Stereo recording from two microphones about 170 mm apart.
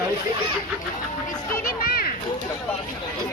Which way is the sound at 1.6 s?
60° left (ahead or behind).